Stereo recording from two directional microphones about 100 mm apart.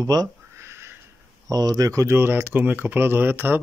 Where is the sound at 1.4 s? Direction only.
40° right (ahead or behind).